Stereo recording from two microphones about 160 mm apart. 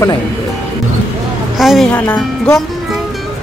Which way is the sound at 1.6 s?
Centre (ahead or behind).